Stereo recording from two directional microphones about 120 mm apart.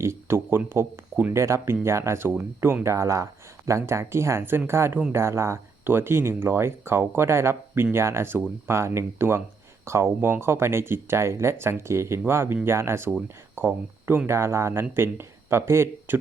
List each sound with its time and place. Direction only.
0.0 s speech: 20° right (ahead or behind)